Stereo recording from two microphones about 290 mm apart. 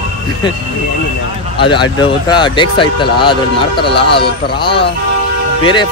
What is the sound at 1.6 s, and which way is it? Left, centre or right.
Speech, centre.